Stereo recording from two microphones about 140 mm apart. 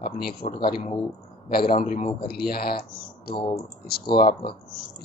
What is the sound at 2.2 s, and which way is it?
Speech, 90° left.